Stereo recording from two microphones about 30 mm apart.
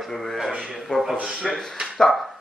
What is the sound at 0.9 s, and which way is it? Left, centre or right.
Speech, left.